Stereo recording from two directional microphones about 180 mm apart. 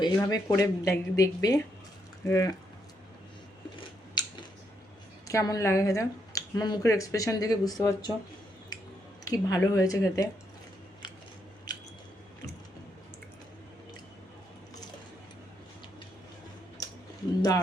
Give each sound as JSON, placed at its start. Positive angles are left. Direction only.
{"t": 0.0, "sound": "speech", "side_deg": 20}
{"t": 3.8, "sound": "scissors", "side_deg": 25}
{"t": 5.3, "sound": "speech", "side_deg": 20}
{"t": 8.7, "sound": "a sound", "side_deg": 20}
{"t": 9.2, "sound": "speech", "side_deg": 20}
{"t": 16.8, "sound": "a sound", "side_deg": 20}